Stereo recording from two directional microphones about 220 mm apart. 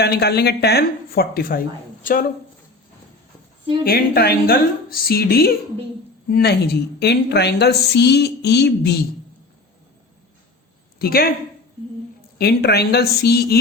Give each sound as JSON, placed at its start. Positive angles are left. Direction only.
{"t": 0.0, "sound": "a woman's voice", "side_deg": 45}
{"t": 3.8, "sound": "a woman's voice", "side_deg": 45}
{"t": 11.0, "sound": "a woman's voice", "side_deg": 45}
{"t": 12.4, "sound": "a woman's voice", "side_deg": 45}